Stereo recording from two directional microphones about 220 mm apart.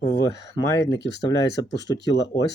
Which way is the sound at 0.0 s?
15° left (ahead or behind).